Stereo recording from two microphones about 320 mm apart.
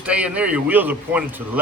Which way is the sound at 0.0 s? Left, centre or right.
Centre.